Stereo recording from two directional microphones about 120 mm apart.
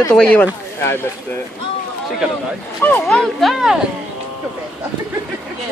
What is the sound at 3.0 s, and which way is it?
Speech, centre (ahead or behind).